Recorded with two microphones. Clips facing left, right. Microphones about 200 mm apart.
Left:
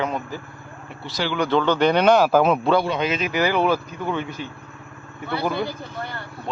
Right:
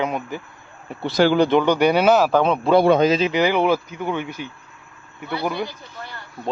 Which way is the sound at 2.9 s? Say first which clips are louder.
Right 8 dB; 40° right (ahead or behind).